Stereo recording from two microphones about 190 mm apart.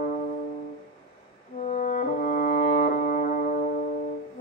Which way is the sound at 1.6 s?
40° left (ahead or behind).